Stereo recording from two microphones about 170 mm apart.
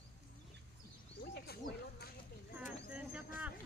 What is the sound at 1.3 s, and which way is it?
Speech, 70° left (ahead or behind).